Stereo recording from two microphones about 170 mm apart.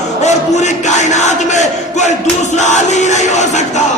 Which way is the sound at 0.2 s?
45° left (ahead or behind).